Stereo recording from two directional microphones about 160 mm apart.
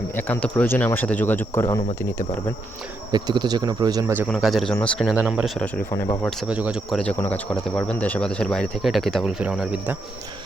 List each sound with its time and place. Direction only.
0.2 s speech: 10° left (ahead or behind)
3.1 s speech: 25° right (ahead or behind)
4.3 s speech: centre (ahead or behind)
5.1 s speech: 10° right (ahead or behind)
5.5 s speech: 10° left (ahead or behind)
6.5 s speech: 5° right (ahead or behind)
7.0 s speech: 10° left (ahead or behind)